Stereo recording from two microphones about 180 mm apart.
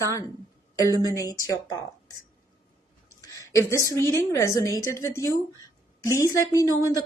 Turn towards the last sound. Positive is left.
turn(degrees=20)  # may be behind; listen again after turning